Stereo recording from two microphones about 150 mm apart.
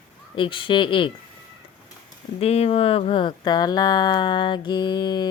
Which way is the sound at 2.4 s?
40° left (ahead or behind).